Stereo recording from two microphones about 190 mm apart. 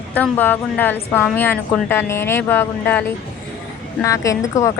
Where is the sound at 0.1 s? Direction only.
10° left (ahead or behind).